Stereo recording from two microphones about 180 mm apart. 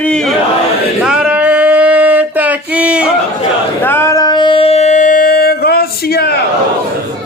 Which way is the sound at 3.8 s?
10° left (ahead or behind).